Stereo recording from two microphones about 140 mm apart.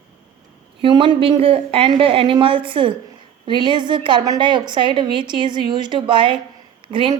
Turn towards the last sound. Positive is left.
turn(degrees=-35)  # may be behind; listen again after turning